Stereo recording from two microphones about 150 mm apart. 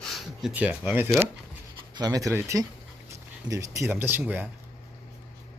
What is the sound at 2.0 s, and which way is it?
Speech, 25° right (ahead or behind).